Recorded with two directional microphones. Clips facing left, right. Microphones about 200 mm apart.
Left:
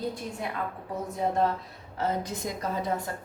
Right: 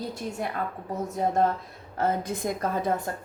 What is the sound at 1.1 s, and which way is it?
Speech, 45° right (ahead or behind).